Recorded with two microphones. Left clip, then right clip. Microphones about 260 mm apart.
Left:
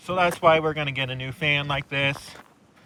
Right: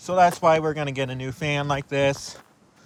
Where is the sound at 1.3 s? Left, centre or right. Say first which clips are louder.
Left 8 dB; right.